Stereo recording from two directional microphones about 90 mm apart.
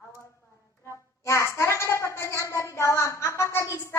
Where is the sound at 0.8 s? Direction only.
35° left (ahead or behind).